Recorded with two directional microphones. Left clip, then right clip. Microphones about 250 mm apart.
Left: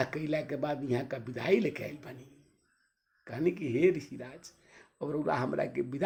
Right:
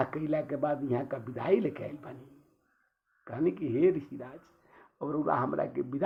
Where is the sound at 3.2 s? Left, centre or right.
Left.